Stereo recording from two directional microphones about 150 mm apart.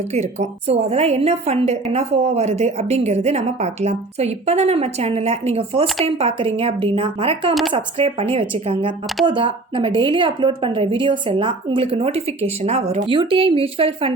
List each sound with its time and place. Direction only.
0.1 s a woman's voice: 50° right (ahead or behind)
13.1 s a woman's voice: 35° right (ahead or behind)